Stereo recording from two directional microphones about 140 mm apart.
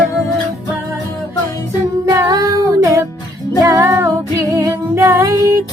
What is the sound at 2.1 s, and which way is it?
Music, 25° right (ahead or behind).